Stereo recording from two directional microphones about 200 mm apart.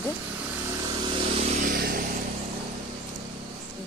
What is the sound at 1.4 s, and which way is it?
Vehicle, 40° right (ahead or behind).